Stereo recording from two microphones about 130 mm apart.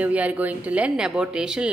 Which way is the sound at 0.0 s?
10° right (ahead or behind).